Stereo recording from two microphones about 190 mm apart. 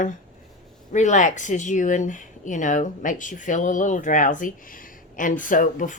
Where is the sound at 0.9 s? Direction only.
40° left (ahead or behind).